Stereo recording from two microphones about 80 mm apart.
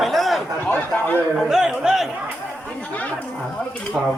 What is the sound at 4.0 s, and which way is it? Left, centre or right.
Speech, centre.